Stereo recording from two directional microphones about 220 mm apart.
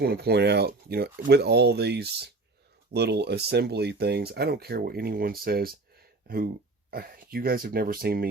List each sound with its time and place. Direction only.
0.0 s speech: 45° right (ahead or behind)